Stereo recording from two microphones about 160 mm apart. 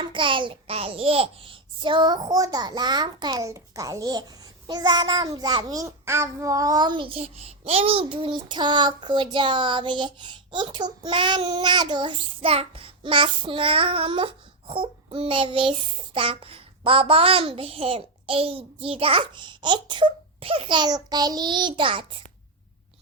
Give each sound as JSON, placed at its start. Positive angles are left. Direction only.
{"t": 0.0, "sound": "a child's voice", "side_deg": -30}